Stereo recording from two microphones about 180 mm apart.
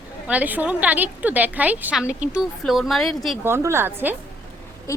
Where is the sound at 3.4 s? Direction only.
15° right (ahead or behind).